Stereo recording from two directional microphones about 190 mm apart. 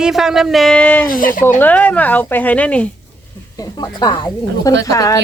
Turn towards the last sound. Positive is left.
turn(degrees=15)  # may be behind; listen again after turning